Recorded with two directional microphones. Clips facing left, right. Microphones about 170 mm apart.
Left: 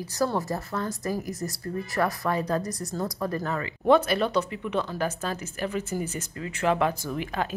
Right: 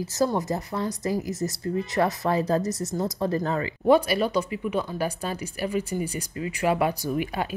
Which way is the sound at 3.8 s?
5° right (ahead or behind).